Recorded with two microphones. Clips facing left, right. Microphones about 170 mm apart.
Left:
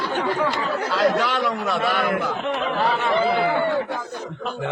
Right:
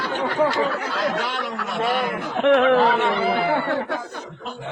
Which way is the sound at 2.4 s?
70° right (ahead or behind).